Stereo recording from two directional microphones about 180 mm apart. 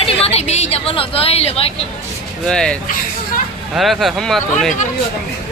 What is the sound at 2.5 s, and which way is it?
Speech, 5° left (ahead or behind).